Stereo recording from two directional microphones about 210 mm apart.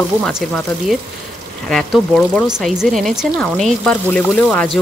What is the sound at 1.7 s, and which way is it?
Speech, 5° left (ahead or behind).